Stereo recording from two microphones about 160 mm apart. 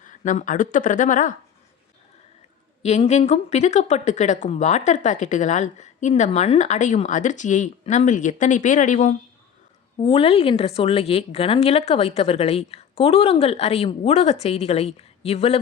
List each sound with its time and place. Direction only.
0.0 s speech: 55° left (ahead or behind)
2.8 s speech: 45° left (ahead or behind)
10.0 s a woman's voice: 35° left (ahead or behind)